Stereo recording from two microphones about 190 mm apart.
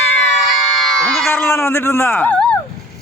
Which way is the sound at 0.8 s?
Centre (ahead or behind).